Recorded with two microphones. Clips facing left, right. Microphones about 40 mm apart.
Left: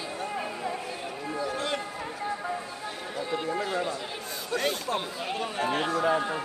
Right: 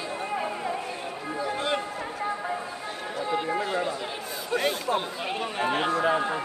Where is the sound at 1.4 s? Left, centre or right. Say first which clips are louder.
Right 4 dB; right.